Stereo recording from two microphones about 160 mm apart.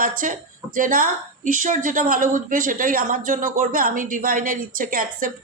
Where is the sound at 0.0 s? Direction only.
60° right (ahead or behind).